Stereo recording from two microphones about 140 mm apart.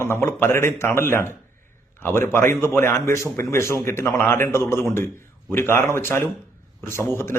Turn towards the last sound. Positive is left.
turn(degrees=15)  # may be behind; listen again after turning